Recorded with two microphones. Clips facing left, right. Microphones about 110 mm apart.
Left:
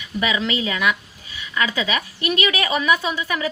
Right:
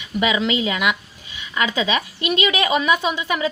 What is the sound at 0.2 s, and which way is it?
A woman's voice, 20° right (ahead or behind).